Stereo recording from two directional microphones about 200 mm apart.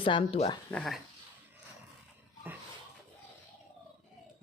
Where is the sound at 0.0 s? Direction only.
25° left (ahead or behind).